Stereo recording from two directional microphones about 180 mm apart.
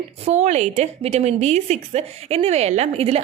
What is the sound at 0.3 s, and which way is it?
A woman's voice, 40° right (ahead or behind).